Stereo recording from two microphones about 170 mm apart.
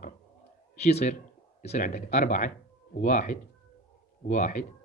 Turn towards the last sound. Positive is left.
turn(degrees=45)  # may be behind; listen again after turning